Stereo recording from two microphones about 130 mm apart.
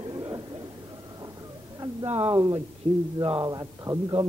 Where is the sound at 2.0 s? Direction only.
50° right (ahead or behind).